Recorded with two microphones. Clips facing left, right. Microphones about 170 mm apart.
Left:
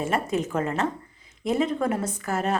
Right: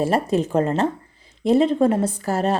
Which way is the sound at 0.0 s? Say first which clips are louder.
Right 6 dB; 35° right (ahead or behind).